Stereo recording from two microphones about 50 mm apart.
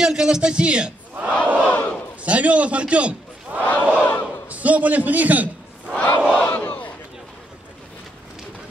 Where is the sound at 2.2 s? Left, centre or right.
Right.